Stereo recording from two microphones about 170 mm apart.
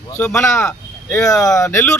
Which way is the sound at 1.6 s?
15° left (ahead or behind).